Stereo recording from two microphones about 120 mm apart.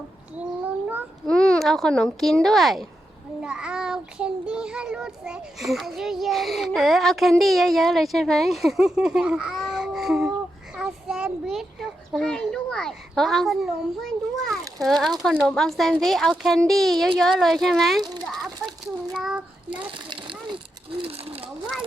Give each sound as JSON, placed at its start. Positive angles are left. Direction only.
{"t": 1.3, "sound": "a child's voice", "side_deg": 5}
{"t": 3.4, "sound": "child singing", "side_deg": -10}
{"t": 10.8, "sound": "a child's voice", "side_deg": -5}
{"t": 14.8, "sound": "child singing", "side_deg": 0}
{"t": 18.3, "sound": "children playing", "side_deg": 5}
{"t": 19.1, "sound": "child singing", "side_deg": -5}
{"t": 19.9, "sound": "a sound", "side_deg": -45}
{"t": 21.0, "sound": "speech", "side_deg": -55}